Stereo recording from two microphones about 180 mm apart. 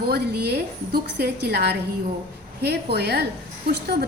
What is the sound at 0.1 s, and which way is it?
A woman's voice, 60° right (ahead or behind).